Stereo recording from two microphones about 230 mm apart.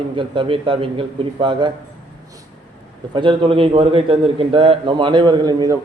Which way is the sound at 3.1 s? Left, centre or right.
Right.